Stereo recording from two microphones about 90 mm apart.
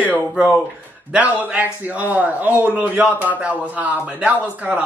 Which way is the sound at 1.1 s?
15° right (ahead or behind).